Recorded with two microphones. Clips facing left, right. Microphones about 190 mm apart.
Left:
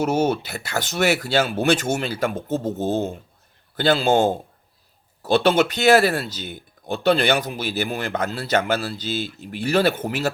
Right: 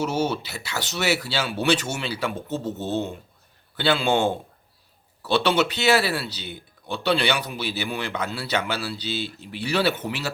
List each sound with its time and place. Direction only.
0.0 s speech: 55° left (ahead or behind)